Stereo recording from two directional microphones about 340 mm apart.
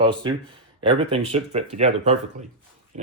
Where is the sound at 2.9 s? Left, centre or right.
Right.